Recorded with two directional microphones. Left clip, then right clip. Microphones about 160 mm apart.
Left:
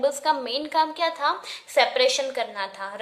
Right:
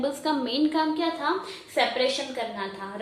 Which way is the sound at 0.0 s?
45° left (ahead or behind).